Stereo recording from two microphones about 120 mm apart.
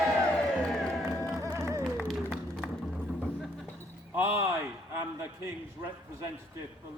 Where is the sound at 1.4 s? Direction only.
25° right (ahead or behind).